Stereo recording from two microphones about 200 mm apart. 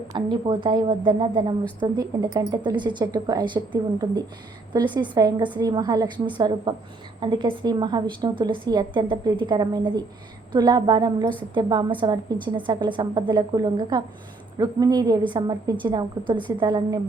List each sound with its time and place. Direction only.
0.1 s a woman's voice: 25° right (ahead or behind)